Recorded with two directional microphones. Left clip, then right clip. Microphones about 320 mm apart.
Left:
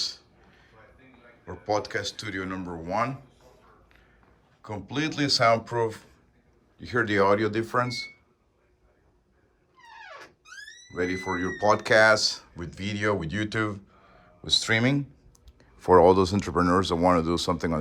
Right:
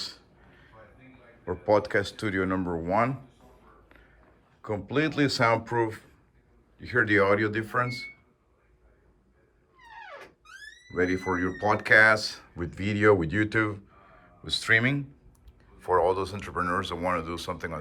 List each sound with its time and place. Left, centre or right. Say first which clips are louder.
1.5 s speech: right 4 dB; centre
3.8 s a sound: right 2 dB; centre
4.6 s speech: right 3 dB; centre
10.9 s speech: right 2 dB; centre
15.5 s speech: left 6 dB; left